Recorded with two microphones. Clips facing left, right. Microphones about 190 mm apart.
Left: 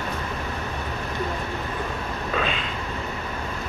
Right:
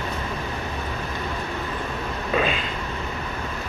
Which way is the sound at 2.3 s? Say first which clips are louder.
Right 4 dB; 5° right (ahead or behind).